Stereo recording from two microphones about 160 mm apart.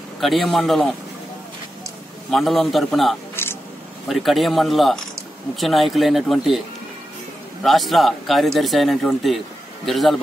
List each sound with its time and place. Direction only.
0.2 s speech: centre (ahead or behind)
2.3 s speech: centre (ahead or behind)
3.4 s a sound: 15° left (ahead or behind)
4.1 s speech: centre (ahead or behind)
7.6 s speech: centre (ahead or behind)